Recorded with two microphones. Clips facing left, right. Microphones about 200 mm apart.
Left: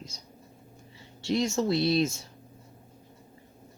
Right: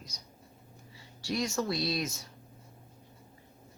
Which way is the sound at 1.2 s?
25° left (ahead or behind).